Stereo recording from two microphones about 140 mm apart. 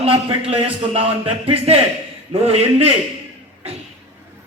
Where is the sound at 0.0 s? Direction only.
45° right (ahead or behind).